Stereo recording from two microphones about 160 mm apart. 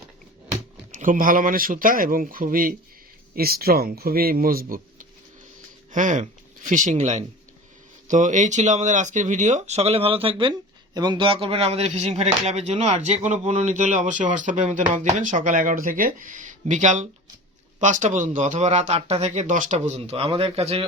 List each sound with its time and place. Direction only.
0.9 s speech: 55° right (ahead or behind)
3.3 s speech: 70° right (ahead or behind)
5.9 s speech: 50° right (ahead or behind)